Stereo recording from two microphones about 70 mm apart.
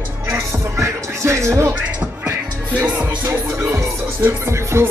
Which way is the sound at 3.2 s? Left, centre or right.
Right.